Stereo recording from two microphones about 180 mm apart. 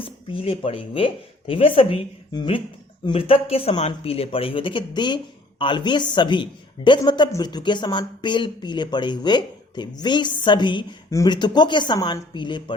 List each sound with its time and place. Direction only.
0.0 s speech: 30° left (ahead or behind)